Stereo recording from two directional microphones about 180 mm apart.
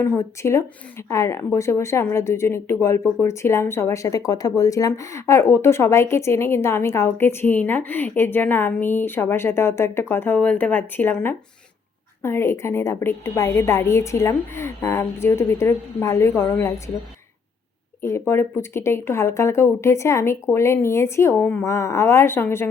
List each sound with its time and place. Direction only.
0.0 s speech: 15° left (ahead or behind)
18.0 s speech: 15° left (ahead or behind)